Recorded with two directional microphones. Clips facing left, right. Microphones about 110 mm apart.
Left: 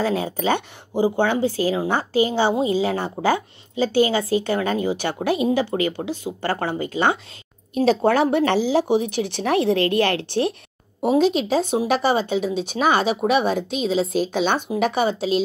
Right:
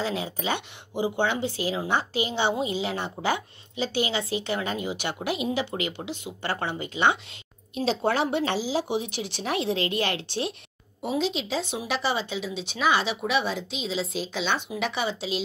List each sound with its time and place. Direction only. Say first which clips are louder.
0.0 s a woman's voice: left 7 dB; 45° left (ahead or behind)